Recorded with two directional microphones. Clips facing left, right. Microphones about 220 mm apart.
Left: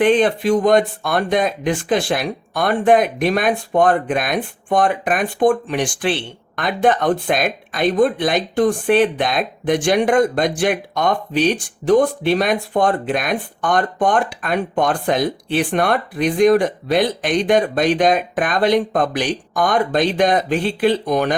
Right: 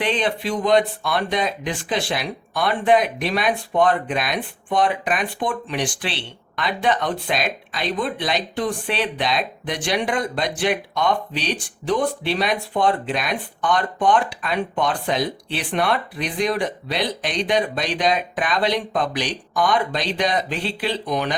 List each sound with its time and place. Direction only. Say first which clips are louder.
0.0 s speech: left 8 dB; 50° left (ahead or behind)